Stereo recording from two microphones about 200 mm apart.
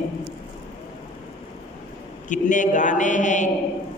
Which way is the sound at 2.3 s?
40° left (ahead or behind).